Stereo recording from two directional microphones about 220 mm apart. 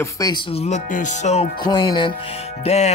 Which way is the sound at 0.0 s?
15° left (ahead or behind).